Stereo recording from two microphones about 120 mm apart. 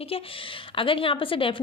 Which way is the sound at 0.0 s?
50° left (ahead or behind).